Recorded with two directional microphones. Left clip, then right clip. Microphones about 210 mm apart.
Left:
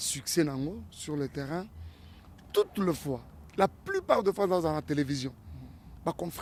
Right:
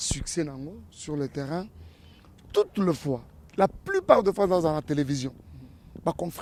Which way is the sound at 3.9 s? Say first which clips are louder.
Right 11 dB; 60° right (ahead or behind).